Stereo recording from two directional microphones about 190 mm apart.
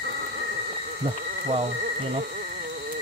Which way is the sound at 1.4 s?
35° right (ahead or behind).